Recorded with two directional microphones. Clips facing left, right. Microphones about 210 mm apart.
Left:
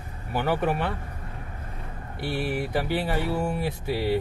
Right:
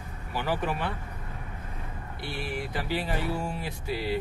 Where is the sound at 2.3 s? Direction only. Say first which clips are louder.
Left 7 dB; 55° left (ahead or behind).